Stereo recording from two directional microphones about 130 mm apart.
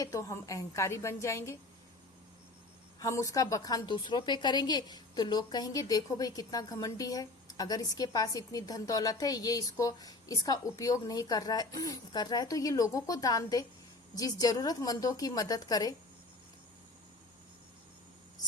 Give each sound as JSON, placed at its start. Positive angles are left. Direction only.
{"t": 0.0, "sound": "a woman's voice", "side_deg": 25}
{"t": 3.0, "sound": "a woman's voice", "side_deg": 25}